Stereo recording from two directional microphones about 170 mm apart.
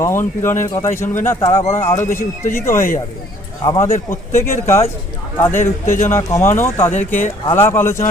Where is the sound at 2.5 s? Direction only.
15° left (ahead or behind).